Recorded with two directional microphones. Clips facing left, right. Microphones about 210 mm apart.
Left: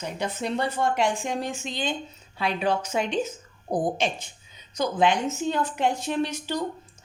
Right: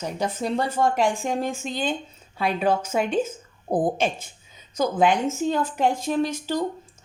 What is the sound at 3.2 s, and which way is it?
A woman's voice, 55° right (ahead or behind).